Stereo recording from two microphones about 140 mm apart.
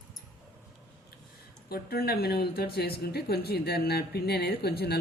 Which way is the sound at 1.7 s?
90° left.